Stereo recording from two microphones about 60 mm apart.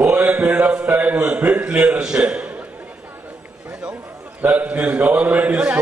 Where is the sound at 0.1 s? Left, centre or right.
Right.